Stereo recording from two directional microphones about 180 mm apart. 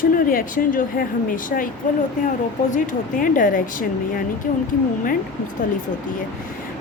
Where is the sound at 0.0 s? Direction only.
50° left (ahead or behind).